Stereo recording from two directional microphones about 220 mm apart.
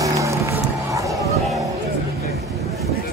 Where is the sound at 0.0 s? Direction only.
15° right (ahead or behind).